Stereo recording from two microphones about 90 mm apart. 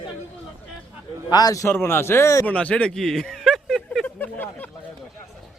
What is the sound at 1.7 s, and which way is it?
Speech, 25° left (ahead or behind).